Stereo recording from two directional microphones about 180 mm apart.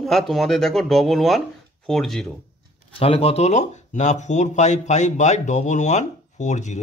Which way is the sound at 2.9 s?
30° left (ahead or behind).